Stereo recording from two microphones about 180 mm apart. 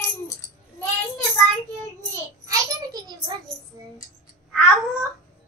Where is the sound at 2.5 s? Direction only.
20° right (ahead or behind).